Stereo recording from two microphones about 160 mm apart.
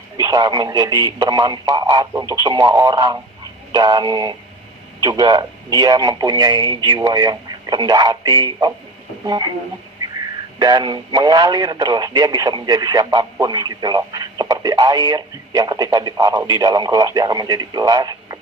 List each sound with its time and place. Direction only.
0.2 s speech: 25° right (ahead or behind)
10.6 s speech: 25° right (ahead or behind)